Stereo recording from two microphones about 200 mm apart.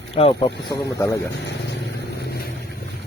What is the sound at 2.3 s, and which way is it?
Vehicle, 50° left (ahead or behind).